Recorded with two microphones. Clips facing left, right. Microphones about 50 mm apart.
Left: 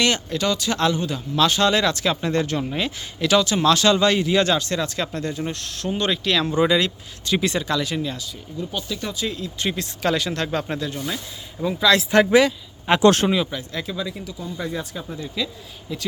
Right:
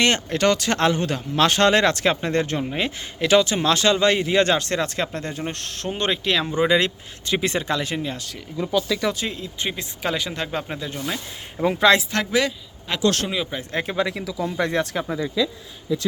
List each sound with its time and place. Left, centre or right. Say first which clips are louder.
0.0 s speech: right 2 dB; right
6.0 s speech: even; right
6.7 s speech: right 1 dB; right
8.3 s speech: right 6 dB; right
9.1 s speech: left 1 dB; right
9.6 s speech: left 4 dB; centre
11.6 s speech: right 3 dB; right
12.1 s speech: left 8 dB; centre
12.9 s speech: left 6 dB; left
13.5 s speech: right 3 dB; right
13.9 s speech: right 5 dB; right